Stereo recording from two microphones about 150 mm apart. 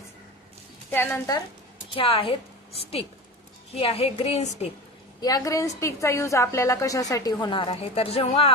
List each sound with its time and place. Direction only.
0.9 s speech: 15° left (ahead or behind)
1.9 s a woman's voice: 35° left (ahead or behind)
5.2 s a woman's voice: 25° left (ahead or behind); by 8.5 s 40° left (ahead or behind)